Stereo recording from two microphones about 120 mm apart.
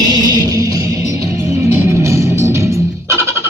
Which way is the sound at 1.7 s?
25° right (ahead or behind).